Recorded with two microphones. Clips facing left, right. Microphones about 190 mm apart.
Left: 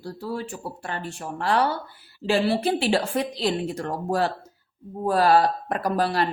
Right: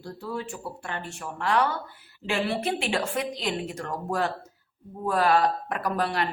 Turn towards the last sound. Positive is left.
turn(degrees=35)  # may be behind; listen again after turning